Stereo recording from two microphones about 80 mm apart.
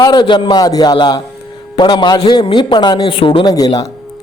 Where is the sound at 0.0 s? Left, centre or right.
Left.